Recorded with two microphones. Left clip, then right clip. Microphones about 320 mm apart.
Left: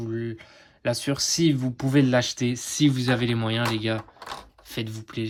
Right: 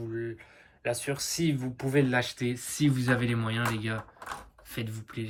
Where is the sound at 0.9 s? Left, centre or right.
Centre.